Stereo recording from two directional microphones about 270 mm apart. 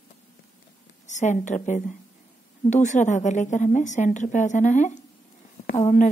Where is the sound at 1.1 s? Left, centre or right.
Left.